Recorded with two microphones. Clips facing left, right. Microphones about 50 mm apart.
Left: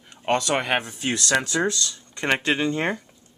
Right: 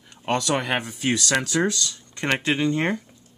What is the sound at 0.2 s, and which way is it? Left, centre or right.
Speech, left.